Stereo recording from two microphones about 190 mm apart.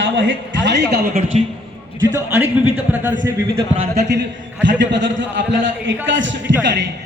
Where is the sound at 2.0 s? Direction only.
10° right (ahead or behind).